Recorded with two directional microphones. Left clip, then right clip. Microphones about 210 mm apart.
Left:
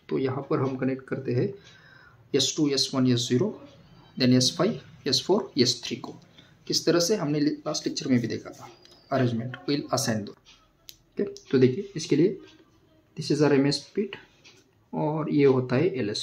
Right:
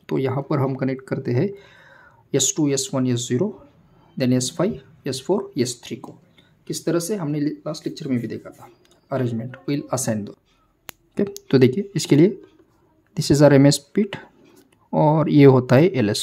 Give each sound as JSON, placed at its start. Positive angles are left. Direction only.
{"t": 0.0, "sound": "speech", "side_deg": -55}
{"t": 10.9, "sound": "speech", "side_deg": -55}